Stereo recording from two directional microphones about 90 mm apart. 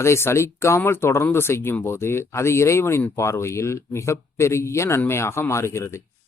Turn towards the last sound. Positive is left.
turn(degrees=30)  # may be behind; listen again after turning